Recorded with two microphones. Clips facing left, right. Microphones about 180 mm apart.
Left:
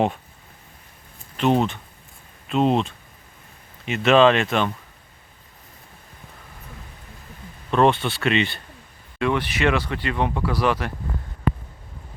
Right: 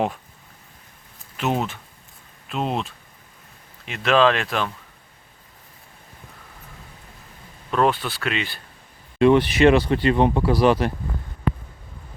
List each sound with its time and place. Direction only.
1.4 s speech: 5° right (ahead or behind)
7.7 s speech: centre (ahead or behind)
9.1 s speech: 30° right (ahead or behind)